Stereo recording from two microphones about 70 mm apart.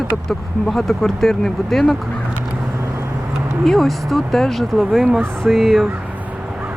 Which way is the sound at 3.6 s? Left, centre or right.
Centre.